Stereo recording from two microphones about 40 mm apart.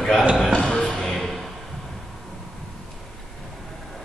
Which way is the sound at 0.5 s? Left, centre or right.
Centre.